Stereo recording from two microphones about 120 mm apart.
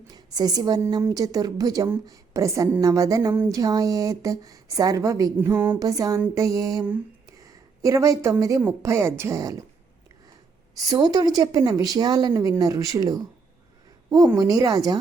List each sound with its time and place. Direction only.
0.1 s a woman's voice: 30° right (ahead or behind); by 5.8 s 15° right (ahead or behind)
5.8 s a woman's voice: 30° right (ahead or behind)
7.3 s a sound: 30° right (ahead or behind)
8.8 s a woman's voice: 20° right (ahead or behind)
10.8 s a woman's voice: 30° right (ahead or behind)
14.3 s a woman's voice: 30° right (ahead or behind)